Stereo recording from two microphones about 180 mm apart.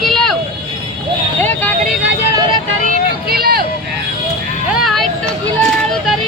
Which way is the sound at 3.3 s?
55° right (ahead or behind).